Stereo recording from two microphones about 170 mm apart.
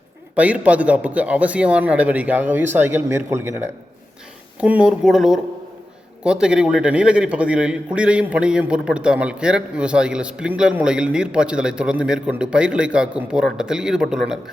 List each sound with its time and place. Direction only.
0.3 s a man's voice: 10° right (ahead or behind)